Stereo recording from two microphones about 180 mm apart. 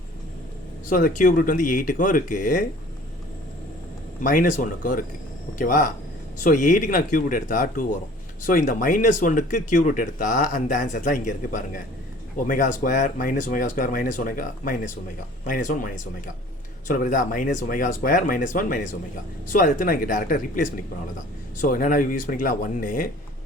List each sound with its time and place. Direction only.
0.9 s speech: 50° left (ahead or behind)
4.2 s speech: 50° left (ahead or behind)